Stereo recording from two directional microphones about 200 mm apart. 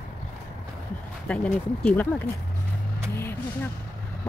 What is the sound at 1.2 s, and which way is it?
Speech, 5° left (ahead or behind).